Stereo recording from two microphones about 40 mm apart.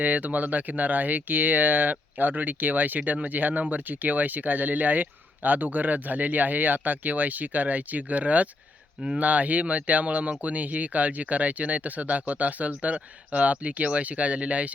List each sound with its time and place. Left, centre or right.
0.0 s speech: right